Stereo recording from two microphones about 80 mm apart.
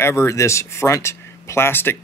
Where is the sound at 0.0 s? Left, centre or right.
Left.